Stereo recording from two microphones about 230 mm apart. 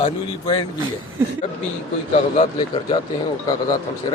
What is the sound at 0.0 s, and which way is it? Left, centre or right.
Speech, left.